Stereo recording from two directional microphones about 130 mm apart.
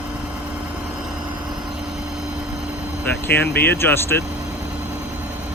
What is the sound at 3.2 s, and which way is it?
Speech, 15° left (ahead or behind).